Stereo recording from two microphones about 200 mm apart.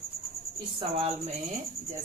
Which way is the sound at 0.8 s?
30° right (ahead or behind).